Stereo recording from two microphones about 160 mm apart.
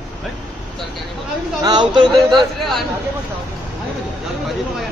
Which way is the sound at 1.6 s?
25° right (ahead or behind).